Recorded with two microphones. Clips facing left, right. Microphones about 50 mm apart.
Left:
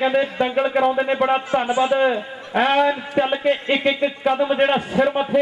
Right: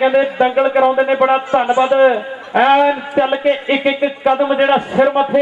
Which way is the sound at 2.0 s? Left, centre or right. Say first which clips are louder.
Right 7 dB; centre.